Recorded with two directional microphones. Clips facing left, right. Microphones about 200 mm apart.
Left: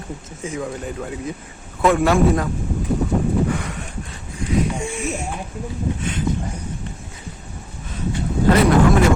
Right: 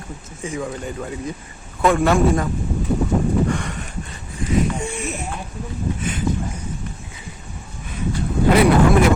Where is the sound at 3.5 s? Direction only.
5° left (ahead or behind).